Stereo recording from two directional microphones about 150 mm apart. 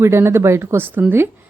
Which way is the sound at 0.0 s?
15° right (ahead or behind).